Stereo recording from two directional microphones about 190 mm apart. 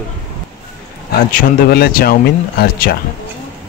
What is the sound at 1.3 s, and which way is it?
Speech, 55° left (ahead or behind).